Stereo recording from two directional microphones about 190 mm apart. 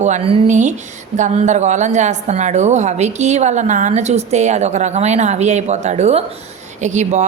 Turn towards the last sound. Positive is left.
turn(degrees=-40)  # may be behind; listen again after turning